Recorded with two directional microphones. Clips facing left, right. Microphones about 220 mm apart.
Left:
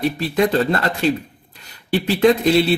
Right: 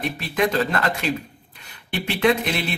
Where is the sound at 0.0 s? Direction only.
35° left (ahead or behind).